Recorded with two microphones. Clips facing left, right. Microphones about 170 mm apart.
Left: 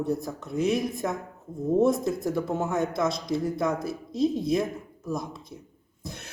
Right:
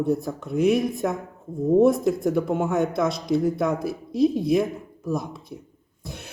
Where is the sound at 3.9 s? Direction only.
65° right (ahead or behind).